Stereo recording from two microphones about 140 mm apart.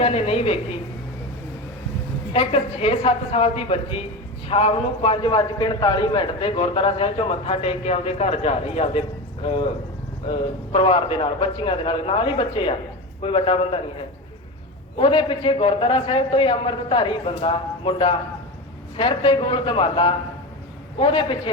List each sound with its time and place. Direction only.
0.0 s a woman's voice: 45° left (ahead or behind)
2.3 s a woman's voice: 40° left (ahead or behind)
14.9 s a man's voice: 35° left (ahead or behind)